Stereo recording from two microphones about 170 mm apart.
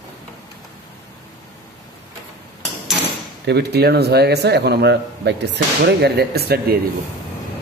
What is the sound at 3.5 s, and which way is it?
A man's voice, 75° right (ahead or behind).